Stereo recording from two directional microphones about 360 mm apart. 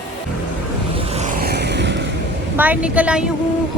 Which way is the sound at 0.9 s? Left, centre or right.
Centre.